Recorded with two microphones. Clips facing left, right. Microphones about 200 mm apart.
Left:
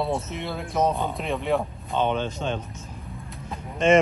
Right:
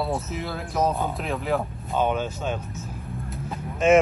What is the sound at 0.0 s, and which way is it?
A man's voice, centre (ahead or behind).